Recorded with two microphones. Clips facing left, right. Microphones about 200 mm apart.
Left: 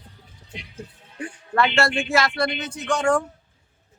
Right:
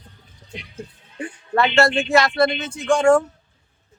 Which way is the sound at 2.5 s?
25° right (ahead or behind).